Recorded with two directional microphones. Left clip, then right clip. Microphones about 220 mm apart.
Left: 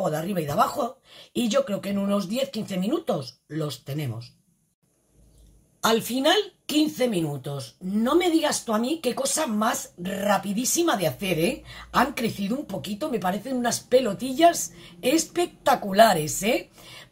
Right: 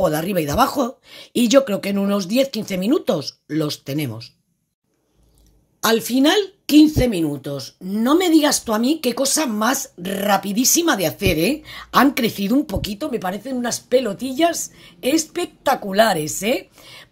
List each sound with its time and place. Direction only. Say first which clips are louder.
0.0 s speech: right 7 dB; 50° right (ahead or behind)
5.8 s speech: right 6 dB; 40° right (ahead or behind)